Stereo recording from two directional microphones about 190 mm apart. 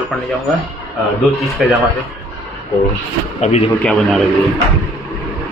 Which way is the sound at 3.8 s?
Centre (ahead or behind).